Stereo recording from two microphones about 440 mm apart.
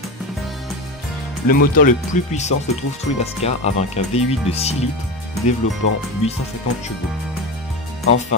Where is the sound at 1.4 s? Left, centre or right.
Centre.